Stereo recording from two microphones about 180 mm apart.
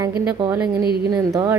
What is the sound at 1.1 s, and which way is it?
Speech, 20° right (ahead or behind).